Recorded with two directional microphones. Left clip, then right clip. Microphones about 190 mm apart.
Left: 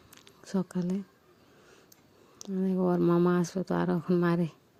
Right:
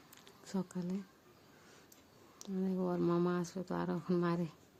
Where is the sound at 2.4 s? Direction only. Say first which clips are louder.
Left 8 dB; 30° left (ahead or behind).